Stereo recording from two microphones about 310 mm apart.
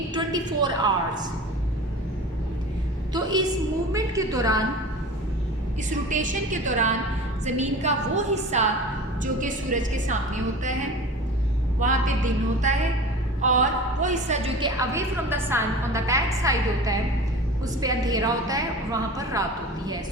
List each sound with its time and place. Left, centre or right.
0.1 s a woman's voice: centre
3.1 s a woman's voice: centre
6.1 s a woman's voice: right
11.8 s a woman's voice: right